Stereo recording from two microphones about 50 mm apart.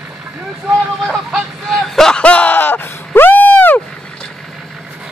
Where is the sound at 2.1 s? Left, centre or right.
Left.